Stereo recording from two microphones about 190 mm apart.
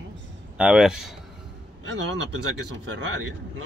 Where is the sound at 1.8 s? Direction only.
70° right (ahead or behind).